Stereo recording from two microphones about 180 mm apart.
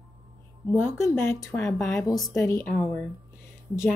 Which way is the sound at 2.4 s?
15° left (ahead or behind).